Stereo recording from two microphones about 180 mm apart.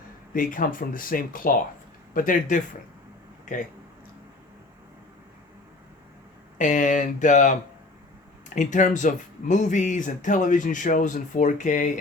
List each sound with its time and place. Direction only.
0.3 s speech: 50° left (ahead or behind)
6.6 s speech: 45° left (ahead or behind)
8.5 s speech: 45° left (ahead or behind)